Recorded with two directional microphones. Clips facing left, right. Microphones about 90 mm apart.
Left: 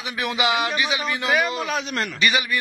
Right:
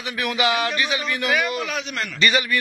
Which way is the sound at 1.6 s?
35° left (ahead or behind).